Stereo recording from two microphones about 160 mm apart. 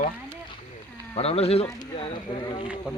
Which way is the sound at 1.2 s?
40° left (ahead or behind).